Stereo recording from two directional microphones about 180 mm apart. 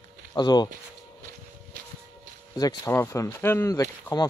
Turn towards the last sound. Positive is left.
turn(degrees=20)  # may be behind; listen again after turning